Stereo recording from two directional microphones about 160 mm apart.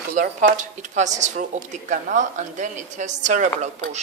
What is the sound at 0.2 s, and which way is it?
A woman's voice, 55° right (ahead or behind).